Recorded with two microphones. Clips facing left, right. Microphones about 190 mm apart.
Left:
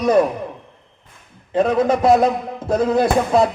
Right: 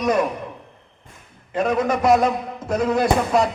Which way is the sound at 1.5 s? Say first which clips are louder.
Left 4 dB; 30° left (ahead or behind).